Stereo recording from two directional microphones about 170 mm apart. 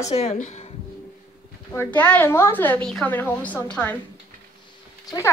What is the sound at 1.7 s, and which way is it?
A woman's voice, 10° left (ahead or behind).